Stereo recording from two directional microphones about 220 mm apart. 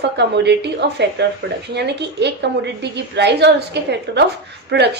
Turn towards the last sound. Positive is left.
turn(degrees=-50)  # may be behind; listen again after turning